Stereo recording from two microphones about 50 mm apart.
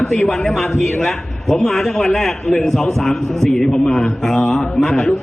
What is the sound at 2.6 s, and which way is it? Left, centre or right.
A man's voice, centre.